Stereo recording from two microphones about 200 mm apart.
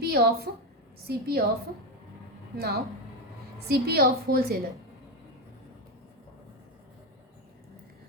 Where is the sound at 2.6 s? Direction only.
50° right (ahead or behind).